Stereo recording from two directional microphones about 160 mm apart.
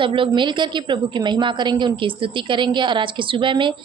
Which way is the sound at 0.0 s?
30° right (ahead or behind).